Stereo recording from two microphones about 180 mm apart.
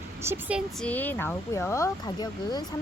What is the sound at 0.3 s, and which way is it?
Speech, 10° right (ahead or behind).